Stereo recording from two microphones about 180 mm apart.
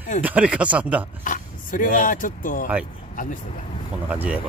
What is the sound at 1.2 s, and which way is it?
Speech, 50° left (ahead or behind).